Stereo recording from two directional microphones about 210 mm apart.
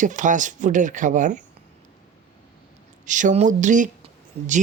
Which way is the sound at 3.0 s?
35° right (ahead or behind).